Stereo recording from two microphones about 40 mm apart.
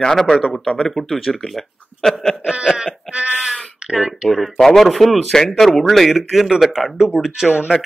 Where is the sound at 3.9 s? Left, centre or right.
Centre.